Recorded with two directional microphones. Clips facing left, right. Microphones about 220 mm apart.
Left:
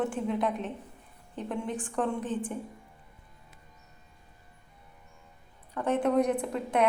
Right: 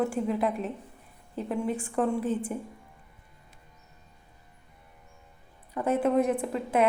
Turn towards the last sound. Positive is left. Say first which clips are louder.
# right 2 dB
turn(degrees=-5)  # may be behind; listen again after turning